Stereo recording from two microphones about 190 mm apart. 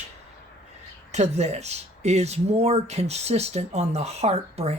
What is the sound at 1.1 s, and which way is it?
Speech, 35° right (ahead or behind).